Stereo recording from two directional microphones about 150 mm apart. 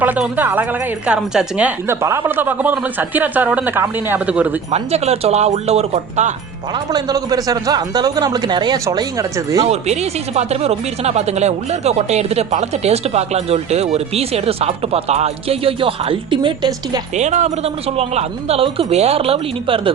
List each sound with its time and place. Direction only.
0.0 s speech: 10° right (ahead or behind)
4.7 s speech: 45° right (ahead or behind)
6.9 s speech: 25° right (ahead or behind)
9.6 s speech: 45° right (ahead or behind); by 17.0 s 30° right (ahead or behind)
17.2 s speech: 50° right (ahead or behind)